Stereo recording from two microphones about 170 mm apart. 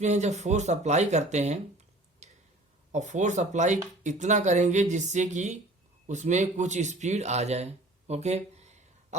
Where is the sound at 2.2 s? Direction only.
40° right (ahead or behind).